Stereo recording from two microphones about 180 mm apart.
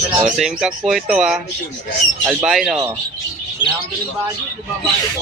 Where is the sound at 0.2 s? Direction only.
5° right (ahead or behind).